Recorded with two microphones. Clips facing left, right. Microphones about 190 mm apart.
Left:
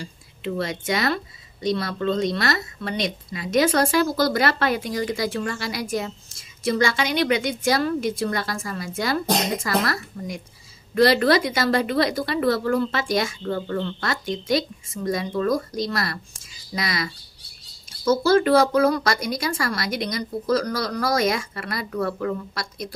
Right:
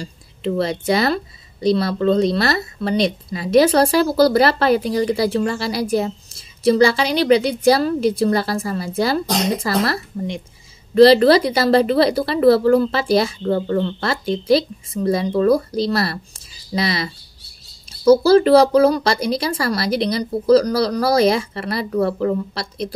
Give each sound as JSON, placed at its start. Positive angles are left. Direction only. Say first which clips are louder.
{"t": 0.0, "sound": "speech", "louder": "right 6 dB", "side_deg": -35}